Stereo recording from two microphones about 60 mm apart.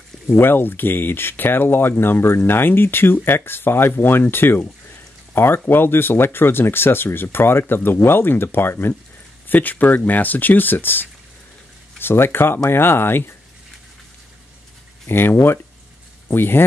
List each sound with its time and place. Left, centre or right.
0.3 s speech: left
15.0 s speech: left